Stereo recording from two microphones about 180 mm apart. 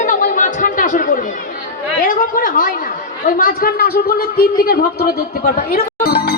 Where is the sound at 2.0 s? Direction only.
50° left (ahead or behind).